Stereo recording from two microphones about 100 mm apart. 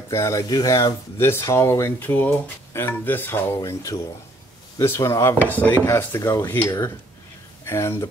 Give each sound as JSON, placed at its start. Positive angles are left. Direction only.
{"t": 0.1, "sound": "speech", "side_deg": 30}
{"t": 4.7, "sound": "speech", "side_deg": 25}